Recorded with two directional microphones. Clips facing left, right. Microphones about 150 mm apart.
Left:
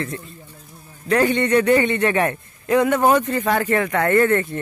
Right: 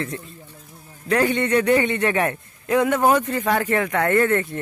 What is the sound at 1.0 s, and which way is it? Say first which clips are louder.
A man's voice: left 2 dB; 10° right (ahead or behind).